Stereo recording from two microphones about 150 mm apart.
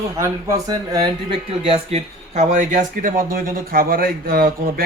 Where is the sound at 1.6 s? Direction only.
45° right (ahead or behind).